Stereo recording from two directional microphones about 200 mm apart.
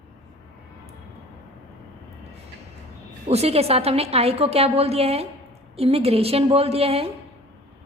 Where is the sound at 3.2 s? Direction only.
30° right (ahead or behind).